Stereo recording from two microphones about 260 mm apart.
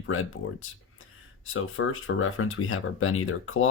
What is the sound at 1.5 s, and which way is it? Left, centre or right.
Speech, left.